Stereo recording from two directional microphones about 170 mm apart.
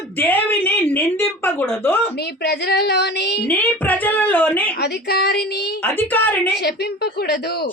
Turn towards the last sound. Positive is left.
turn(degrees=75)  # may be behind; listen again after turning